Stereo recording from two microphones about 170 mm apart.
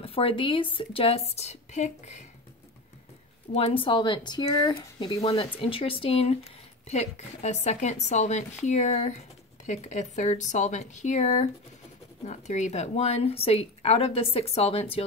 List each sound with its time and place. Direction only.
0.0 s a woman's voice: 35° left (ahead or behind)
3.5 s a woman's voice: 35° left (ahead or behind)